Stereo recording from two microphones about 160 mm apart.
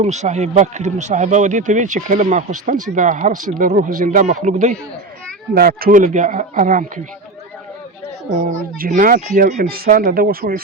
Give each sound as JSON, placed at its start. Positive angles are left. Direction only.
{"t": 0.0, "sound": "speech", "side_deg": -45}
{"t": 5.5, "sound": "speech", "side_deg": -70}
{"t": 8.3, "sound": "speech", "side_deg": -50}